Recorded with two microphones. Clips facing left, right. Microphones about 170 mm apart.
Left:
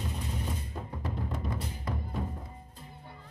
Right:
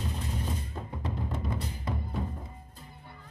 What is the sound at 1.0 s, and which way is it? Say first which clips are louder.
Music: right 1 dB; 25° right (ahead or behind).